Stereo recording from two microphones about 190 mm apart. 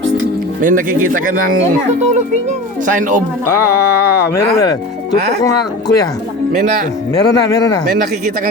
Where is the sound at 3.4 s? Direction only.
15° left (ahead or behind).